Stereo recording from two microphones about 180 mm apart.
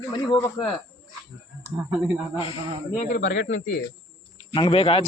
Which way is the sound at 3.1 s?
65° left (ahead or behind).